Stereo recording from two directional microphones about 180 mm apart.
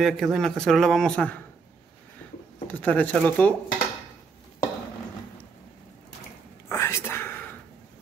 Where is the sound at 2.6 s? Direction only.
10° left (ahead or behind).